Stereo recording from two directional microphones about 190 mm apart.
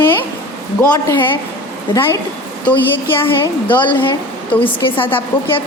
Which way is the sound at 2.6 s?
10° left (ahead or behind).